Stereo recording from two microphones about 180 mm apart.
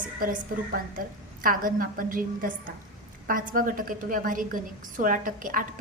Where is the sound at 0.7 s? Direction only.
50° right (ahead or behind).